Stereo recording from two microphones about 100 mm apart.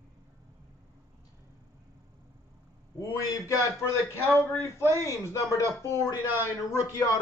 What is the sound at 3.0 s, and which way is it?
A man's voice, 30° left (ahead or behind).